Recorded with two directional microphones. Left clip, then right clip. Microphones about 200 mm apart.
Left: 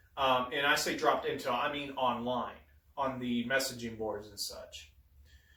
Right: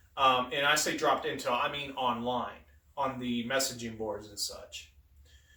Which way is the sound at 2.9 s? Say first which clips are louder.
Right 1 dB; 15° right (ahead or behind).